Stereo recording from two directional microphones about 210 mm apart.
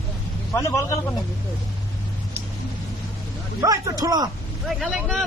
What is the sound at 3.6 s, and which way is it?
Speech, 15° right (ahead or behind).